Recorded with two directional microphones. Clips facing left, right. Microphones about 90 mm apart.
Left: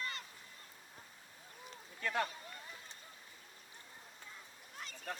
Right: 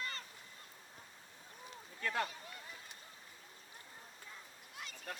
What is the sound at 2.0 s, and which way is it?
Speech, 35° left (ahead or behind).